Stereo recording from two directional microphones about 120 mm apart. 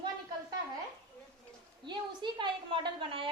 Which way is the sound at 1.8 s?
40° right (ahead or behind).